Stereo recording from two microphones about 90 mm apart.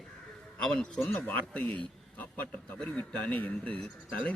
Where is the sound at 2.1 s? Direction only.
20° left (ahead or behind).